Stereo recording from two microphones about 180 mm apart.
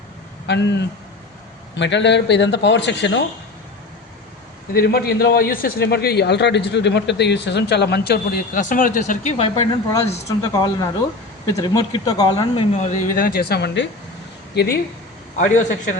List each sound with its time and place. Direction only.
0.4 s speech: 75° left (ahead or behind)
4.7 s a man's voice: 60° left (ahead or behind); by 9.6 s 35° left (ahead or behind)
10.2 s speech: 20° left (ahead or behind)
12.8 s a man's voice: 45° left (ahead or behind); by 14.8 s 60° left (ahead or behind)
15.4 s a man's voice: 45° left (ahead or behind)